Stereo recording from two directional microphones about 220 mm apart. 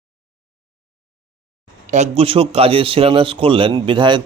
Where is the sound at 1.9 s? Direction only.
30° right (ahead or behind).